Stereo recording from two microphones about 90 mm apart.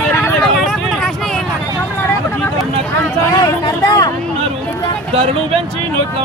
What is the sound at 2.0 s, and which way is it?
Vehicle, 25° left (ahead or behind).